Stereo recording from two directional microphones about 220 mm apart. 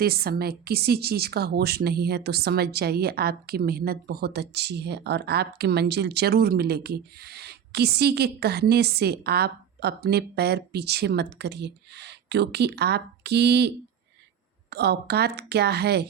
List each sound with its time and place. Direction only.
0.0 s speech: 45° right (ahead or behind)